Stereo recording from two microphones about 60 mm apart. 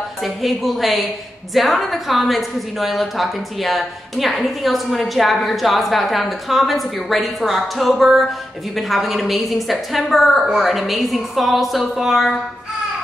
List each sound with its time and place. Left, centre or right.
0.2 s a woman's voice: centre